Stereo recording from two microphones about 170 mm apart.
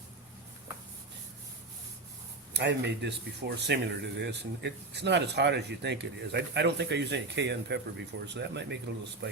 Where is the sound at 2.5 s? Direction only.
90° right.